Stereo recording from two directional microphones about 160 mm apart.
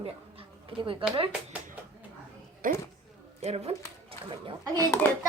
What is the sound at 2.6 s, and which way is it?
Speech, 60° right (ahead or behind).